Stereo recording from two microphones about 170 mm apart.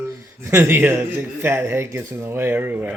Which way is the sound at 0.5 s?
15° right (ahead or behind).